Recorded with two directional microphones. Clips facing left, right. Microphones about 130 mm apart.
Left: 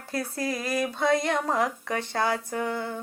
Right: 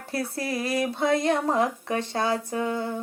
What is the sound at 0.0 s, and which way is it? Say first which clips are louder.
Speech: even; 25° right (ahead or behind).